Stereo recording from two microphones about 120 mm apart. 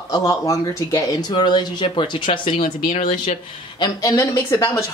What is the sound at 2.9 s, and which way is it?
Speech, 90° left.